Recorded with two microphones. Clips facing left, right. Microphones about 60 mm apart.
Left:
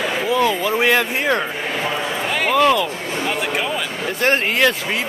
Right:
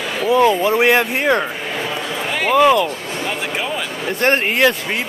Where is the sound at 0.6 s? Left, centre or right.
Centre.